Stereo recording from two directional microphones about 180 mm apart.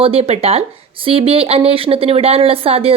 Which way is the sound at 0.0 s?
35° right (ahead or behind).